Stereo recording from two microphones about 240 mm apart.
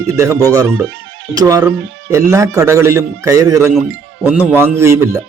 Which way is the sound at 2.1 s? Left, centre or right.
Centre.